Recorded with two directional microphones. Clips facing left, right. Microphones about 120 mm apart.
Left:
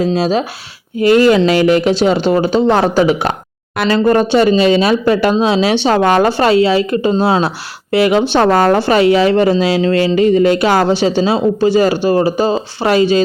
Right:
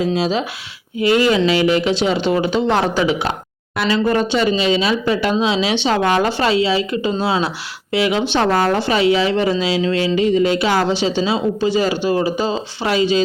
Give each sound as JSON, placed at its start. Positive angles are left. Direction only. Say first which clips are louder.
{"t": 0.0, "sound": "speech", "louder": "left 4 dB", "side_deg": 40}